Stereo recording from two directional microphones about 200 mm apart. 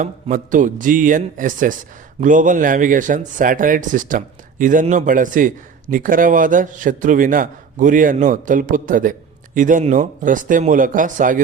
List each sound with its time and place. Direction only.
0.0 s speech: 40° right (ahead or behind)